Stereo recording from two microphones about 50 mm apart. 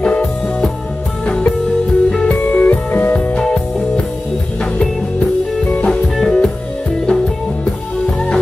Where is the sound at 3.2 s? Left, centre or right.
Left.